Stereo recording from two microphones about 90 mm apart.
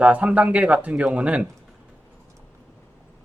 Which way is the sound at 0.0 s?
15° right (ahead or behind).